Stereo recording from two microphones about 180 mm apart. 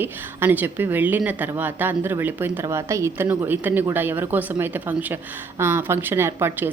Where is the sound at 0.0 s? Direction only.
10° right (ahead or behind).